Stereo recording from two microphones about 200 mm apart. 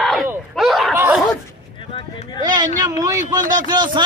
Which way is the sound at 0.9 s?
10° right (ahead or behind).